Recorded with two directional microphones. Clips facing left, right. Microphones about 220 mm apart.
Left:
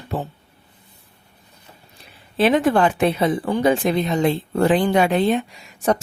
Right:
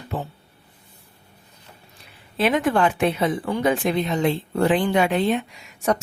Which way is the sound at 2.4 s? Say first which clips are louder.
Left 3 dB; 30° left (ahead or behind).